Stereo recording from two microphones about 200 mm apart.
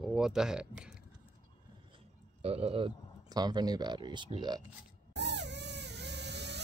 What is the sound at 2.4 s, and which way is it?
Speech, 30° right (ahead or behind).